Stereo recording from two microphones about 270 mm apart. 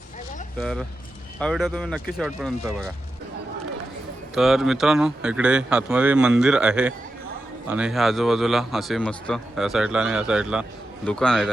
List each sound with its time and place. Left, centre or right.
0.6 s a man's voice: centre
4.4 s a man's voice: centre